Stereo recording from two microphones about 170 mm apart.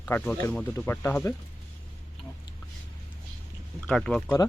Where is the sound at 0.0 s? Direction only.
10° left (ahead or behind).